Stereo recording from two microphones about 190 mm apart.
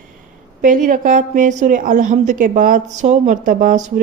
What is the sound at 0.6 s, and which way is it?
A woman's voice, 45° right (ahead or behind).